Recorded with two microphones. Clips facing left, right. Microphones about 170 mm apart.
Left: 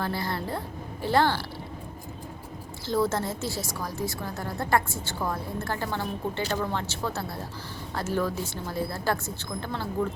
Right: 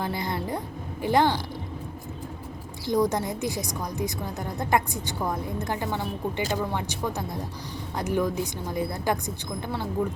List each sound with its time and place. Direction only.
0.0 s a woman's voice: 20° right (ahead or behind)
2.8 s a woman's voice: 15° right (ahead or behind)